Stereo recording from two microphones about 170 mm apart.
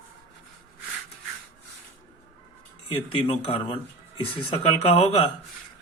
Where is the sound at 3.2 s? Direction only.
35° left (ahead or behind).